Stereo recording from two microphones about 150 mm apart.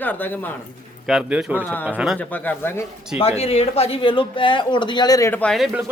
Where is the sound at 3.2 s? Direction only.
40° left (ahead or behind); by 5.3 s 25° left (ahead or behind).